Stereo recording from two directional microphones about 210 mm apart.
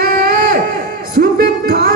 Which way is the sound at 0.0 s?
45° right (ahead or behind).